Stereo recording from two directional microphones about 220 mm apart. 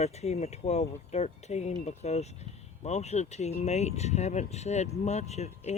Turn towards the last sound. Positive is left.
turn(degrees=30)  # may be behind; listen again after turning